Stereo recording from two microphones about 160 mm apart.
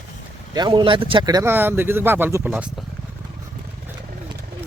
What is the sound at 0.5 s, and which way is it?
Speech, 25° right (ahead or behind).